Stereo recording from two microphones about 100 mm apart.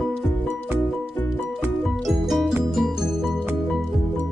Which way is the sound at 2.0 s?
Centre (ahead or behind).